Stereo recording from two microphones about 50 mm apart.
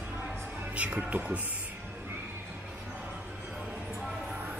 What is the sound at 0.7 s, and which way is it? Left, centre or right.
Speech, right.